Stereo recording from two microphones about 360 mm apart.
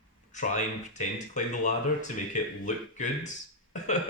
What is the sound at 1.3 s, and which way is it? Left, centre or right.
Speech, left.